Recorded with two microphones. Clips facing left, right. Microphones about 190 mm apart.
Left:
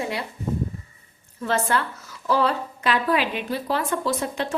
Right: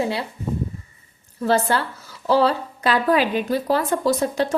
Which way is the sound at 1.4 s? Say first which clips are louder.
Right 4 dB; 35° right (ahead or behind).